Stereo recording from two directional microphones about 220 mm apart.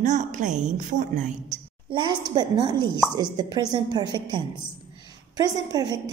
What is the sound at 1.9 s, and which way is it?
A woman's voice, 20° right (ahead or behind).